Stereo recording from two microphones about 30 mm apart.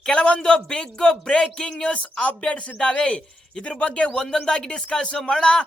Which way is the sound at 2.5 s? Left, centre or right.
Left.